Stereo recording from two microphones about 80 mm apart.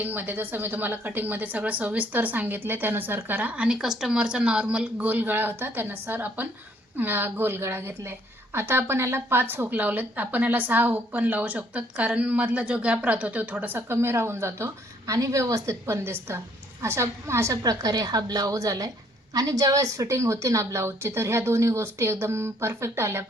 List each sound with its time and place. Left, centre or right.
0.0 s a woman's voice: right